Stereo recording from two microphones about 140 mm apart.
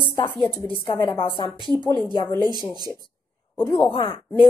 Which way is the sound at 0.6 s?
35° left (ahead or behind).